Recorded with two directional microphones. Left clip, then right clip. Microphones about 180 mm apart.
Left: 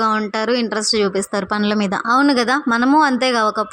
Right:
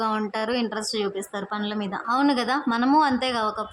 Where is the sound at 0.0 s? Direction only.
25° left (ahead or behind).